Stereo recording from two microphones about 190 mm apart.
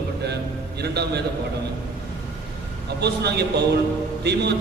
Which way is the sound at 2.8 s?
60° right (ahead or behind).